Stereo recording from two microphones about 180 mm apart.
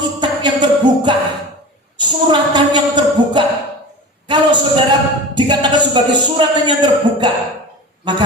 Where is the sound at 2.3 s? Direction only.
25° right (ahead or behind).